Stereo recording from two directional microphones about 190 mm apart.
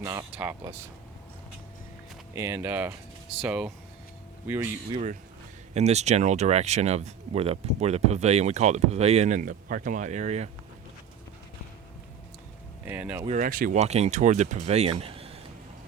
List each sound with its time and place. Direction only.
0.0 s speech: 15° right (ahead or behind)
2.3 s speech: 10° right (ahead or behind)
5.7 s speech: 35° right (ahead or behind)
12.8 s speech: 10° right (ahead or behind)
13.2 s speech: 40° right (ahead or behind)